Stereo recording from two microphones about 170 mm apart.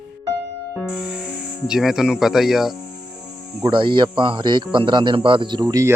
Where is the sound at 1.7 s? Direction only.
Centre (ahead or behind).